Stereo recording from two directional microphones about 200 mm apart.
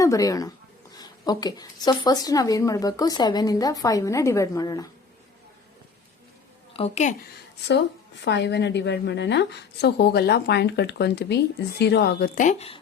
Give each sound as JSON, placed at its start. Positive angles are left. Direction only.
{"t": 0.0, "sound": "a woman's voice", "side_deg": 15}
{"t": 6.7, "sound": "a woman's voice", "side_deg": 30}
{"t": 7.7, "sound": "a woman's voice", "side_deg": 60}